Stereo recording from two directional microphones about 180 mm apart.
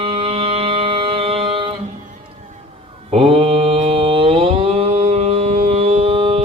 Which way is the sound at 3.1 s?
30° right (ahead or behind).